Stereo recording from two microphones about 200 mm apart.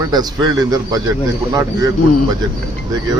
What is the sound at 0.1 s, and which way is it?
Speech, 20° right (ahead or behind).